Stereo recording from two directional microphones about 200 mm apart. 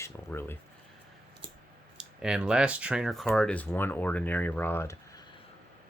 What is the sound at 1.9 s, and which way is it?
Speech, 5° right (ahead or behind).